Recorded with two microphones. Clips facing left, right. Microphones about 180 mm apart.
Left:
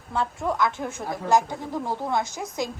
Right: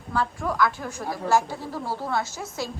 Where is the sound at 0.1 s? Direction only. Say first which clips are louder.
Even; 20° left (ahead or behind).